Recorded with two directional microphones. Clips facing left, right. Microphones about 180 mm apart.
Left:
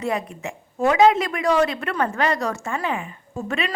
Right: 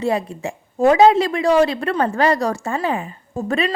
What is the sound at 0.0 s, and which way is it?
A woman's voice, 30° right (ahead or behind).